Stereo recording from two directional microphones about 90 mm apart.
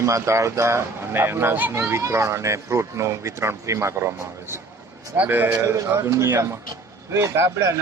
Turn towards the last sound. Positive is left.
turn(degrees=-35)  # may be behind; listen again after turning